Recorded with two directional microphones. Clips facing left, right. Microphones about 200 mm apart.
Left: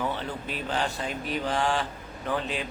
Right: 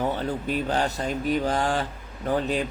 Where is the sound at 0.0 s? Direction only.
40° right (ahead or behind).